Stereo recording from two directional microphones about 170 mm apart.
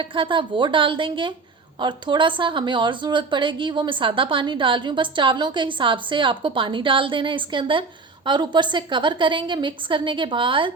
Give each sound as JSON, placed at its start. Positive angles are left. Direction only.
{"t": 0.0, "sound": "a woman's voice", "side_deg": -30}